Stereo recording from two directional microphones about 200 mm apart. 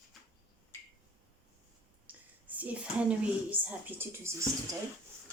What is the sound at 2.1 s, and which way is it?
A woman's voice, 5° right (ahead or behind).